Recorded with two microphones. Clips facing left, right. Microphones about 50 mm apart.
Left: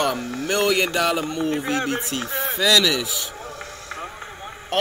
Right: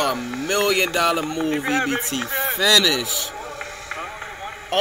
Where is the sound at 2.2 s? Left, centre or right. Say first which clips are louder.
Right 2 dB; centre.